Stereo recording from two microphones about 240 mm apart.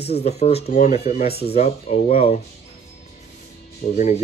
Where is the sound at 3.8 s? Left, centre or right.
Left.